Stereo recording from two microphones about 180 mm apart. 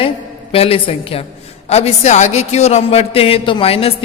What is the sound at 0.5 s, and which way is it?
A man's voice, 30° left (ahead or behind).